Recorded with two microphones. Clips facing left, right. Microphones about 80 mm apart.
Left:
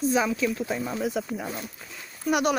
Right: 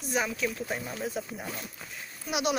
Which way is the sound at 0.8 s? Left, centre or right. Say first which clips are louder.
Left 6 dB; left.